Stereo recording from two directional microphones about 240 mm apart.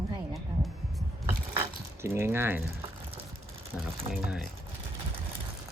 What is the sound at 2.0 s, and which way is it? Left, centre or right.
Speech, centre.